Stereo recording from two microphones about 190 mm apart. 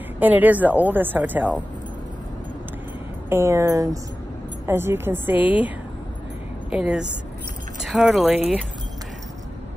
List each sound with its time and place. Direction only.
0.2 s a woman's voice: 10° right (ahead or behind)
3.3 s a woman's voice: 15° right (ahead or behind)
6.7 s speech: 5° right (ahead or behind)